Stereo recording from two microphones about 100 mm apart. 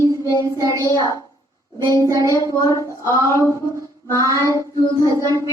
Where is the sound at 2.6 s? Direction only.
30° left (ahead or behind).